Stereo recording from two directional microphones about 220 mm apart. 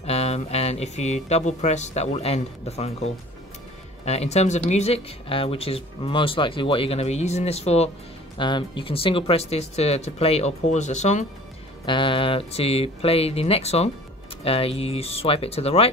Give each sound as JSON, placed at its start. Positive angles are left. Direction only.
{"t": 0.0, "sound": "speech", "side_deg": 30}